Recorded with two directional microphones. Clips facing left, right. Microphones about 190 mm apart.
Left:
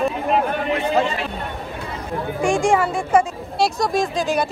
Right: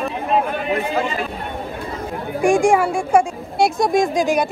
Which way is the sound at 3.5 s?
55° right (ahead or behind).